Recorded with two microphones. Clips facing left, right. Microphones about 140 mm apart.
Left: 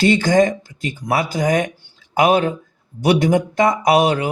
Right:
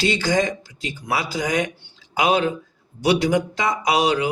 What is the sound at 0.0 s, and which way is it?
A man's voice, 50° left (ahead or behind).